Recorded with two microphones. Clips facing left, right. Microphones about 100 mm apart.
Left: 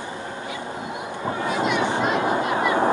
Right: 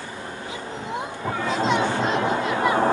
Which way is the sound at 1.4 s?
20° left (ahead or behind).